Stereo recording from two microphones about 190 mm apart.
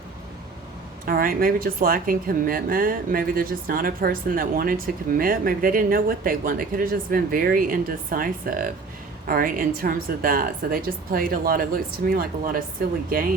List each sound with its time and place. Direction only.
1.0 s a woman's voice: 50° right (ahead or behind)